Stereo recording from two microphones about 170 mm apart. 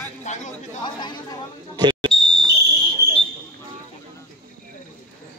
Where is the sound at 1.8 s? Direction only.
25° right (ahead or behind).